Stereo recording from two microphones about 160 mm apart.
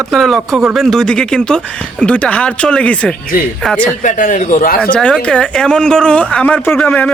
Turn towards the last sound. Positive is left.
turn(degrees=10)  # may be behind; listen again after turning